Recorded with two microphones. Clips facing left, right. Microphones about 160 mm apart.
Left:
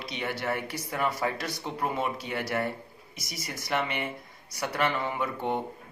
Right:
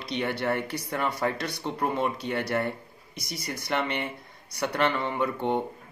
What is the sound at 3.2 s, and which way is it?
Speech, 60° right (ahead or behind).